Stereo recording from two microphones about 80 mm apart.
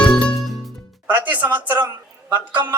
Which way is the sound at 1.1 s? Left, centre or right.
Centre.